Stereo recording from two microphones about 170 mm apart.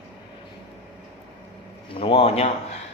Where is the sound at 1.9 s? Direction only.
35° left (ahead or behind).